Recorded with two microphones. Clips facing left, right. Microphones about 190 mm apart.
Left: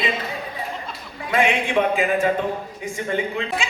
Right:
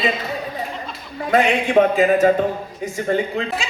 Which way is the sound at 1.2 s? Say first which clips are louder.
Right 3 dB; 40° right (ahead or behind).